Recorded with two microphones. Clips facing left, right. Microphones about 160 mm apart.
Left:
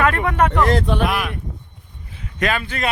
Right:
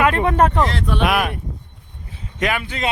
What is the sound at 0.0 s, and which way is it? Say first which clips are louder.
Speech: right 2 dB; 20° right (ahead or behind).